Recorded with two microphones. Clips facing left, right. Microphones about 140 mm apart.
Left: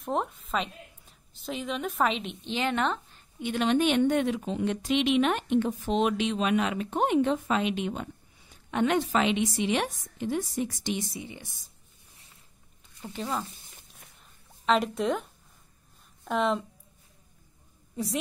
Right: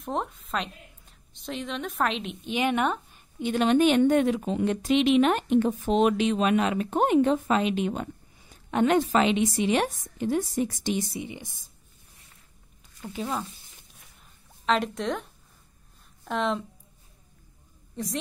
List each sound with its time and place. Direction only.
0.0 s a woman's voice: centre (ahead or behind)
2.5 s speech: 15° right (ahead or behind)
3.3 s a woman's voice: 35° right (ahead or behind)
11.1 s speech: 15° right (ahead or behind)
13.1 s speech: 5° right (ahead or behind)
14.7 s speech: centre (ahead or behind)
16.3 s speech: centre (ahead or behind)
18.0 s a woman's voice: 5° left (ahead or behind)